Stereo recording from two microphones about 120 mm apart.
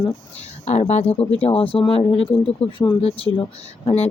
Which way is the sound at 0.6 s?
65° left (ahead or behind).